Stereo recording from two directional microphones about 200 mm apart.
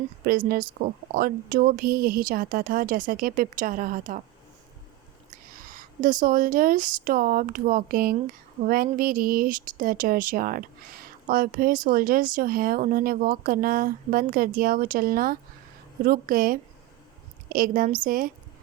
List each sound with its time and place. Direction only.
0.3 s speech: 50° right (ahead or behind)
5.3 s speech: 45° right (ahead or behind)